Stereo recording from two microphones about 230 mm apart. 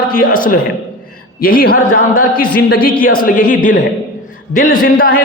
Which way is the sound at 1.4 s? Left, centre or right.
Left.